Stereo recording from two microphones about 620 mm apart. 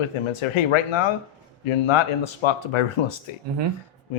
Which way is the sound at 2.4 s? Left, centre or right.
Left.